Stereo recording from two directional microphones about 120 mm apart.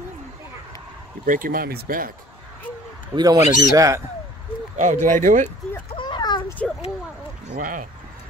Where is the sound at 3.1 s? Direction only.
35° right (ahead or behind).